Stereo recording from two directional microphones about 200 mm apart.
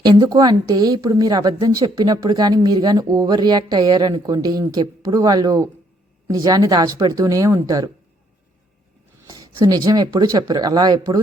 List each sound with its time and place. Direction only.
0.0 s a woman's voice: 20° right (ahead or behind)
9.2 s a woman's voice: 20° right (ahead or behind)